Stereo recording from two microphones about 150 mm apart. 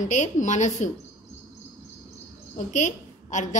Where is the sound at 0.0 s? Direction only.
55° left (ahead or behind).